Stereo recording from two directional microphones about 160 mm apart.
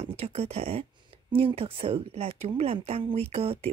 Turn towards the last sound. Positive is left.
turn(degrees=-40)  # may be behind; listen again after turning